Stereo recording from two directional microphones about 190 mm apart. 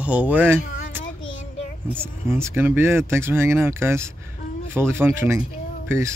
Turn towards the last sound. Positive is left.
turn(degrees=-15)  # may be behind; listen again after turning